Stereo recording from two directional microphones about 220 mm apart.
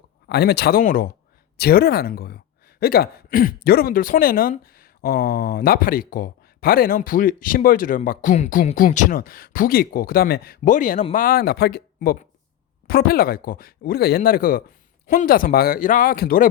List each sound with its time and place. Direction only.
0.3 s speech: 45° left (ahead or behind)